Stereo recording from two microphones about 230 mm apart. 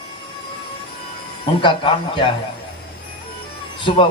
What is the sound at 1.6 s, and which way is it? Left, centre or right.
Speech, left.